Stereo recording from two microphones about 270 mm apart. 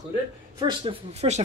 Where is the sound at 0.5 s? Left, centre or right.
Centre.